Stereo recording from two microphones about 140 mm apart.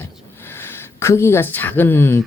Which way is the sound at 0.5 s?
15° left (ahead or behind).